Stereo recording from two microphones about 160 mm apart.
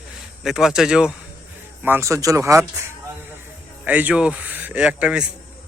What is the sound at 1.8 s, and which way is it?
Speech, 15° right (ahead or behind).